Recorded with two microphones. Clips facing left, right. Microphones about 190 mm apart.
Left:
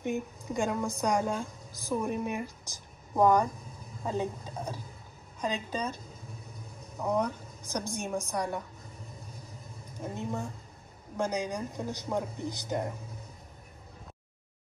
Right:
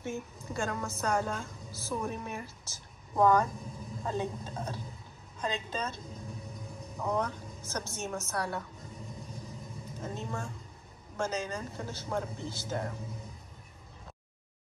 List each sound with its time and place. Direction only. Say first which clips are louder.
0.0 s a woman's voice: left 5 dB; 15° left (ahead or behind)
7.0 s speech: left 3 dB; 15° left (ahead or behind)
10.0 s speech: left 3 dB; 15° left (ahead or behind)